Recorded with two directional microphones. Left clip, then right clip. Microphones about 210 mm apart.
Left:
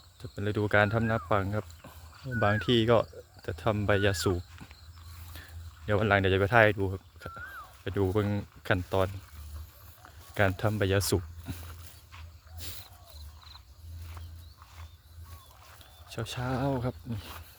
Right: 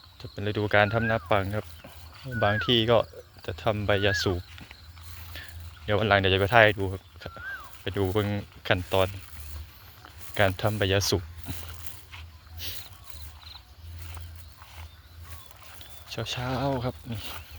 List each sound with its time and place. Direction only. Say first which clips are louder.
0.2 s speech: right 2 dB; 25° left (ahead or behind)
10.3 s speech: right 3 dB; 25° left (ahead or behind)
12.6 s speech: right 7 dB; 30° left (ahead or behind)
16.0 s speech: right 3 dB; 25° left (ahead or behind)